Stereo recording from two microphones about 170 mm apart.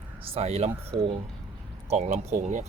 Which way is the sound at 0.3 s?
40° right (ahead or behind).